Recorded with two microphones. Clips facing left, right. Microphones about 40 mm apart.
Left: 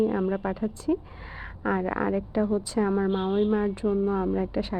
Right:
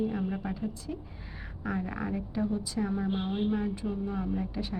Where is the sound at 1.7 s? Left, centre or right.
Left.